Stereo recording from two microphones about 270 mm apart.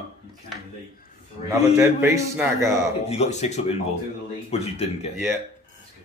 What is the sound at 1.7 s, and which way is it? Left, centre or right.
Speech, centre.